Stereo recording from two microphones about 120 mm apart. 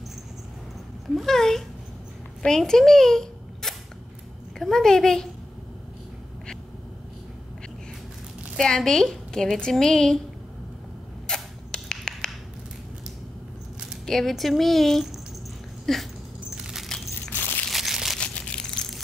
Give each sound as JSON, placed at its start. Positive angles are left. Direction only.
{"t": 1.1, "sound": "a woman's voice", "side_deg": 5}
{"t": 8.5, "sound": "a woman's voice", "side_deg": 5}
{"t": 11.2, "sound": "a sound", "side_deg": 5}
{"t": 13.7, "sound": "speech", "side_deg": 0}
{"t": 15.8, "sound": "dog", "side_deg": 0}
{"t": 16.5, "sound": "a sound", "side_deg": -5}
{"t": 17.3, "sound": "crushing", "side_deg": 15}
{"t": 17.6, "sound": "crushing", "side_deg": 0}